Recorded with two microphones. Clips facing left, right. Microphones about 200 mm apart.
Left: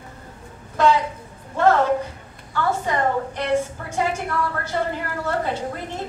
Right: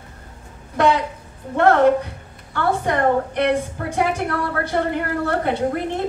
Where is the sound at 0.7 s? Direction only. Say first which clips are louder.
Right 1 dB; 60° right (ahead or behind).